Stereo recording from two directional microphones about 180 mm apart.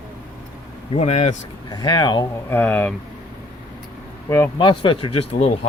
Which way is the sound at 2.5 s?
10° left (ahead or behind).